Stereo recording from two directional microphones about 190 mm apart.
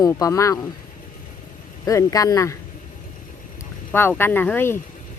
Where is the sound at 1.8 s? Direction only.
15° left (ahead or behind).